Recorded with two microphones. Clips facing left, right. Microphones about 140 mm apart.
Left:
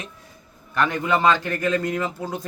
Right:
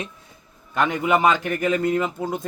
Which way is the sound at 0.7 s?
20° right (ahead or behind).